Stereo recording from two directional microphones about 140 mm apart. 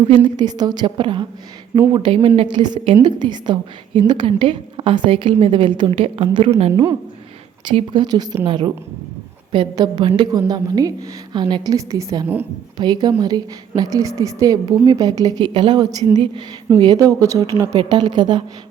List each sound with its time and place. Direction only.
0.1 s a woman's voice: 30° right (ahead or behind); by 6.8 s 50° right (ahead or behind)
7.6 s a woman's voice: 35° right (ahead or behind)
16.1 s a woman's voice: 40° right (ahead or behind)